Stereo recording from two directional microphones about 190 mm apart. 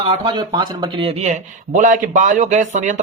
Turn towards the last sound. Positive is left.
turn(degrees=-40)  # may be behind; listen again after turning